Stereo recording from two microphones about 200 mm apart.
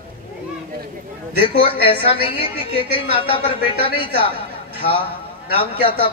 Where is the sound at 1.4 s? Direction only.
25° left (ahead or behind).